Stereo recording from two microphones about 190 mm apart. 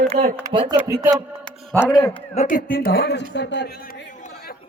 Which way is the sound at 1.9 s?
30° left (ahead or behind).